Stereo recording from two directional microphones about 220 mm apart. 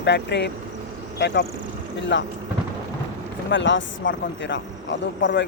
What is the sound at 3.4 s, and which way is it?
Speech, 55° left (ahead or behind).